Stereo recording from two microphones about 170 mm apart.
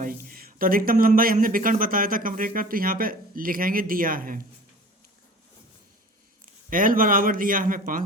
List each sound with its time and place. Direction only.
0.0 s speech: 55° right (ahead or behind)
6.7 s speech: 55° right (ahead or behind)